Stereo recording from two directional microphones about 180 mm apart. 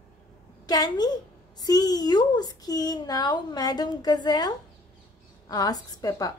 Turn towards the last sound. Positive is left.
turn(degrees=20)  # may be behind; listen again after turning